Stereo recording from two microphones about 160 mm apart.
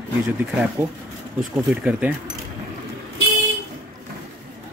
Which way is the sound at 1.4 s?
5° right (ahead or behind).